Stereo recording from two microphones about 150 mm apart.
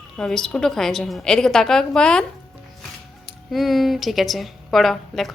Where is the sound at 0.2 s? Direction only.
5° left (ahead or behind).